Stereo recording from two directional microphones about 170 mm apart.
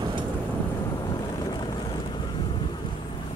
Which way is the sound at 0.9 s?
20° left (ahead or behind).